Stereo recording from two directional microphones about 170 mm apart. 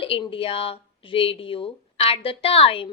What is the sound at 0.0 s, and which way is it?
A woman's voice, 30° left (ahead or behind).